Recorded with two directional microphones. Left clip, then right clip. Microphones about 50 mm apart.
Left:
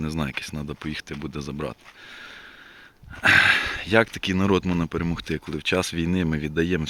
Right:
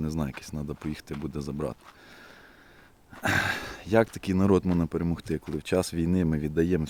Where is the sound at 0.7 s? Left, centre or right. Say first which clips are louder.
Left 1 dB; right.